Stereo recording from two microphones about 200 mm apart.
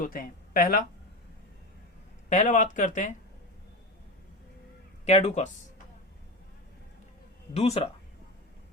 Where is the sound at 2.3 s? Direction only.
40° left (ahead or behind).